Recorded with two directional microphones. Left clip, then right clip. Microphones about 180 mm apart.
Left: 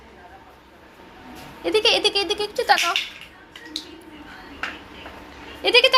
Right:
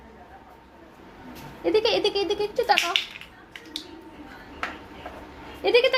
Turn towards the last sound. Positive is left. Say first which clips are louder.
# left 4 dB
turn(degrees=-10)  # may be behind; listen again after turning